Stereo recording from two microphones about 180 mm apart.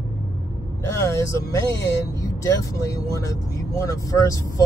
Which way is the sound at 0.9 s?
15° left (ahead or behind).